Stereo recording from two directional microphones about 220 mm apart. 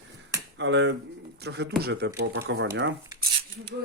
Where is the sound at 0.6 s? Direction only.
55° right (ahead or behind).